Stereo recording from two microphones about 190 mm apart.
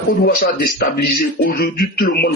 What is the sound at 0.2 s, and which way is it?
A man's voice, 55° left (ahead or behind).